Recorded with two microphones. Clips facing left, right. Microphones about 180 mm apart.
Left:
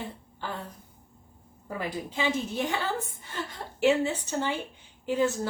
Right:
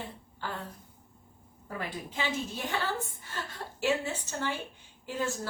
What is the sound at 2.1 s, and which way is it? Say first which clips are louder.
Speech: left 4 dB; 15° left (ahead or behind).